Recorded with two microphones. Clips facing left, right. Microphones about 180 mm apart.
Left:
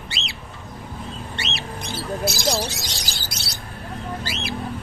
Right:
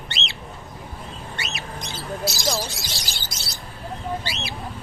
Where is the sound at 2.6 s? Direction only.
70° left (ahead or behind).